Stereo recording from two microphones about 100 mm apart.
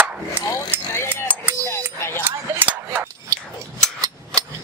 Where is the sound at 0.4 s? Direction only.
40° left (ahead or behind).